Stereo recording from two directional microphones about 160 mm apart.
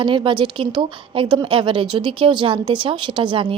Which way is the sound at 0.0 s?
30° right (ahead or behind).